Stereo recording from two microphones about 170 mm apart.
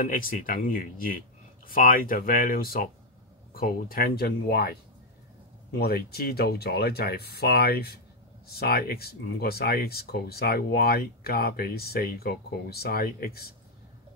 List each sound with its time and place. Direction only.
0.0 s speech: 55° left (ahead or behind)